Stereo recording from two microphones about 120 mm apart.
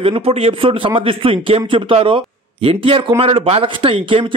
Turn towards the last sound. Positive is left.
turn(degrees=-45)  # may be behind; listen again after turning